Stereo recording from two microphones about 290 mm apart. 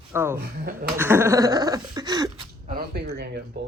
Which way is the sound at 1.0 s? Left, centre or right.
Centre.